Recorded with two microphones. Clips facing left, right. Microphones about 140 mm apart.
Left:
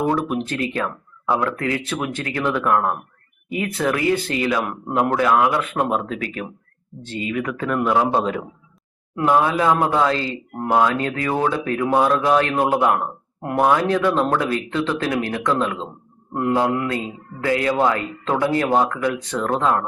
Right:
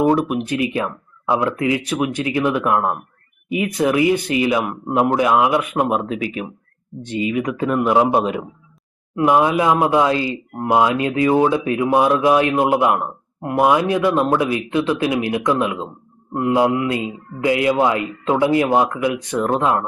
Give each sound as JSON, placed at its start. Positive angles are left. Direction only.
{"t": 0.0, "sound": "speech", "side_deg": -15}